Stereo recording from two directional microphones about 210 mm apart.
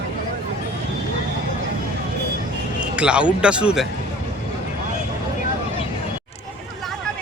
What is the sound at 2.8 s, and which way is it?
Speech, 5° right (ahead or behind).